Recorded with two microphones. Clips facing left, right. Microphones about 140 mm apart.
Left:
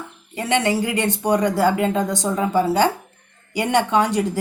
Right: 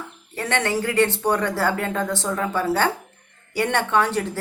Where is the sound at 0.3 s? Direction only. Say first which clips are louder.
Left 4 dB; 15° left (ahead or behind).